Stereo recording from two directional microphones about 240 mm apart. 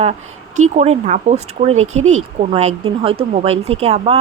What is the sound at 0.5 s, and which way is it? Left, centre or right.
A woman's voice, right.